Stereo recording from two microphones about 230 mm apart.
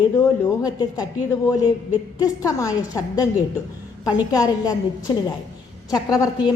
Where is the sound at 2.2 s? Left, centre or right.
Centre.